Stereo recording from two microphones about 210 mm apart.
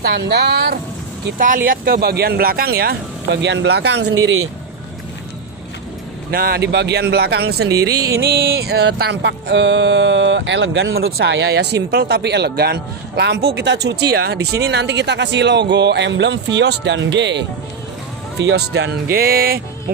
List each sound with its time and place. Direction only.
0.0 s speech: 50° right (ahead or behind); by 4.5 s 65° right (ahead or behind)
6.3 s speech: 45° right (ahead or behind)
8.2 s a sound: 50° right (ahead or behind)
19.1 s speech: 45° right (ahead or behind)